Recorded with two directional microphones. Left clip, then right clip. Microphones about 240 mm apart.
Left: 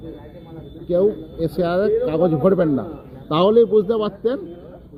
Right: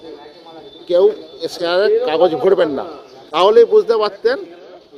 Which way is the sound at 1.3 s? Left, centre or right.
Centre.